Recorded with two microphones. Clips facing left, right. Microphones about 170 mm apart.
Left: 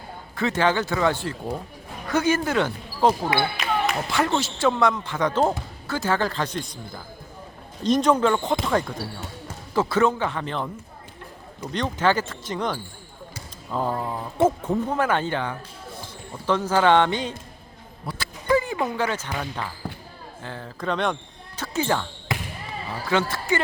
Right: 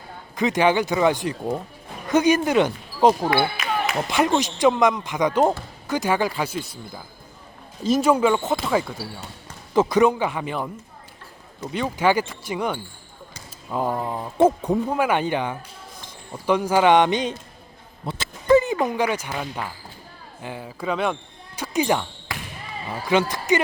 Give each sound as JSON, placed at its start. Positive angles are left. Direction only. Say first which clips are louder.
{"t": 0.3, "sound": "speech", "louder": "right 3 dB", "side_deg": -15}
{"t": 3.6, "sound": "a sound", "louder": "even", "side_deg": -5}
{"t": 4.1, "sound": "speech", "louder": "right 6 dB", "side_deg": -15}
{"t": 18.0, "sound": "basketball bounce", "louder": "right 2 dB", "side_deg": -25}
{"t": 20.4, "sound": "speech", "louder": "right 2 dB", "side_deg": -10}